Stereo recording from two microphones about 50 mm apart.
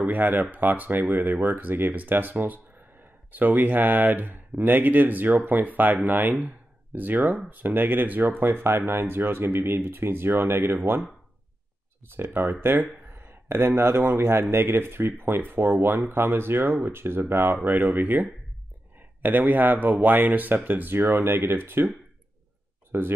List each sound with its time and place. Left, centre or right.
0.0 s speech: right
8.5 s speech: right
12.2 s speech: right
17.9 s speech: right